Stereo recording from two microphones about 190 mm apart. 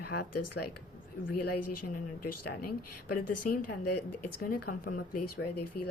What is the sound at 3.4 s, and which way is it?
Speech, 50° left (ahead or behind).